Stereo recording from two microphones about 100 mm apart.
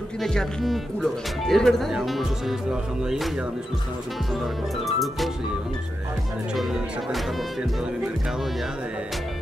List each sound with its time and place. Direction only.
0.2 s speech: 5° left (ahead or behind)
4.3 s speech: centre (ahead or behind)
6.5 s speech: centre (ahead or behind)